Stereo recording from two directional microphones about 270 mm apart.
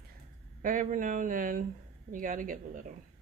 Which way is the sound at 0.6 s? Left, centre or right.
Right.